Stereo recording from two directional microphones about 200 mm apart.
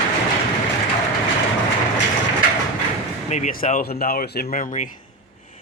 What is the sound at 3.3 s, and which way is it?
Speech, 35° left (ahead or behind).